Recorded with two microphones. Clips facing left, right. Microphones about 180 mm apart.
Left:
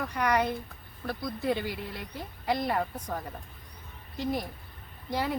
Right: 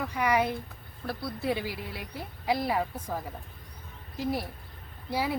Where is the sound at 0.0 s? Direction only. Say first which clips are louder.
Right 1 dB; 5° right (ahead or behind).